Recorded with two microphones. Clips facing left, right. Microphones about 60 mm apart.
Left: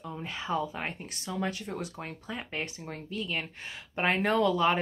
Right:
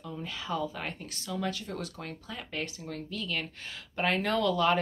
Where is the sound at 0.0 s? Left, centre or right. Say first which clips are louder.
Left 1 dB; left.